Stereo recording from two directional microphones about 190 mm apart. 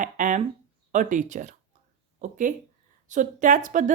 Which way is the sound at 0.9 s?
40° right (ahead or behind).